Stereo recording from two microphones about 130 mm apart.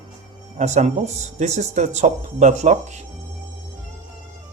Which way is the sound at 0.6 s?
60° right (ahead or behind).